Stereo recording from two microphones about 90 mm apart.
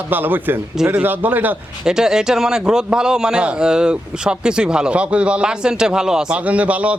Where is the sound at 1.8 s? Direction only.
5° right (ahead or behind).